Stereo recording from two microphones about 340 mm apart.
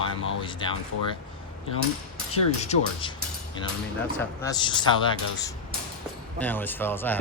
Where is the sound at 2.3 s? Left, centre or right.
Centre.